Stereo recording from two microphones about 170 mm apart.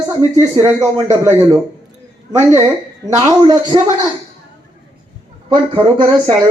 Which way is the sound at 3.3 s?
25° right (ahead or behind).